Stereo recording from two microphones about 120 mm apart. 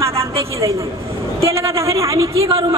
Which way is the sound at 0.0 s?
25° right (ahead or behind).